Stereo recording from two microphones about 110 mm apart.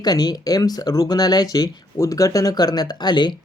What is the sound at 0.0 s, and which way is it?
Speech, 35° left (ahead or behind).